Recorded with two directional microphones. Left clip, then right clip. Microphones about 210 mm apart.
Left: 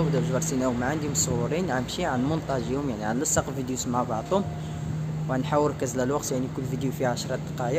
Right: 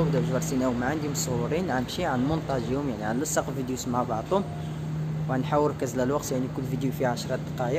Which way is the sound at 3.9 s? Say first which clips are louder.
Left 1 dB; 5° left (ahead or behind).